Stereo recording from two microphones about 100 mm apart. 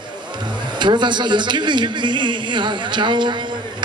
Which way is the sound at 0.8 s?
50° right (ahead or behind).